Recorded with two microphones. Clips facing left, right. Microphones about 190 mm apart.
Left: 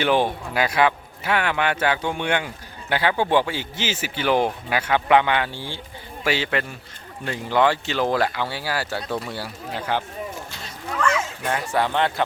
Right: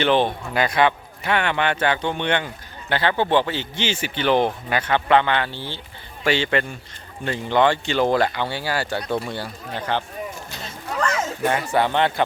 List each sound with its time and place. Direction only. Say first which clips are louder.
0.0 s a man's voice: right 1 dB; 10° left (ahead or behind)
11.0 s a sound: left 1 dB; 40° right (ahead or behind)
11.4 s speech: right 4 dB; centre (ahead or behind)